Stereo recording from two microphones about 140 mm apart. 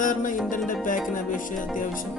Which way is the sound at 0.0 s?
70° left (ahead or behind).